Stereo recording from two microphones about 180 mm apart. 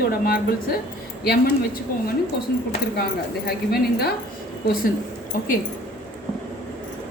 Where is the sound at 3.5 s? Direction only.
60° left (ahead or behind).